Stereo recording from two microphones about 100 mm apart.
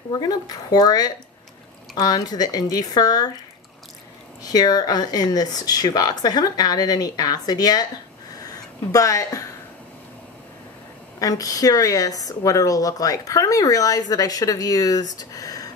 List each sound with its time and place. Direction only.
0.1 s speech: 40° left (ahead or behind)
4.4 s speech: 40° left (ahead or behind)
8.4 s a sound: 35° left (ahead or behind)
11.1 s speech: 35° left (ahead or behind)